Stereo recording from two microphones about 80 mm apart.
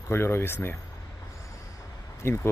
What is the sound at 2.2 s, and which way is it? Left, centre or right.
Speech, left.